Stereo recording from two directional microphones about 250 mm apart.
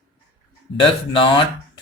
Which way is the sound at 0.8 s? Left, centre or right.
Centre.